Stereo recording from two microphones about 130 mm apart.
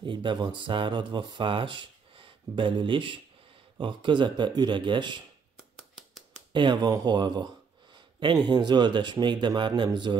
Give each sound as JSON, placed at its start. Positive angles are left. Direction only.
{"t": 0.0, "sound": "speech", "side_deg": -40}
{"t": 5.8, "sound": "a sound", "side_deg": -5}
{"t": 6.5, "sound": "speech", "side_deg": -35}